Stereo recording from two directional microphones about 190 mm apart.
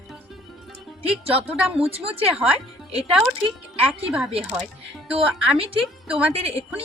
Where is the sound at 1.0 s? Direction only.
30° right (ahead or behind).